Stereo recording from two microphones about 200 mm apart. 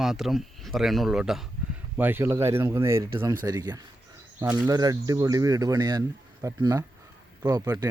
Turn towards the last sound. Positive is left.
turn(degrees=-15)  # may be behind; listen again after turning